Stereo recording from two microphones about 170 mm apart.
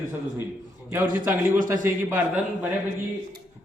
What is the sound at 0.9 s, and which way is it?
Speech, 10° right (ahead or behind).